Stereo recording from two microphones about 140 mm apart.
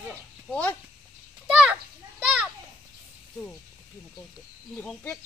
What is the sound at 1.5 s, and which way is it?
Children playing, 5° right (ahead or behind).